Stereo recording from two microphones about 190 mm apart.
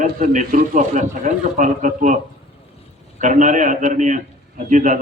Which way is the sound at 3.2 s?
40° right (ahead or behind).